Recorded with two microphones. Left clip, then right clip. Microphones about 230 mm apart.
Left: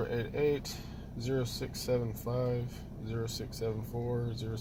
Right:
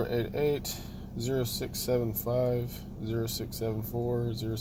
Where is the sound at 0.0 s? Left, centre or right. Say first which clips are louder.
Right 2 dB; right.